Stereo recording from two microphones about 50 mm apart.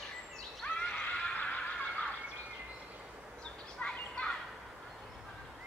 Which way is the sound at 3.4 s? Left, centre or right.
Left.